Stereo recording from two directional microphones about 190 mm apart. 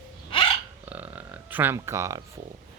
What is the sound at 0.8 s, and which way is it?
Speech, 10° right (ahead or behind).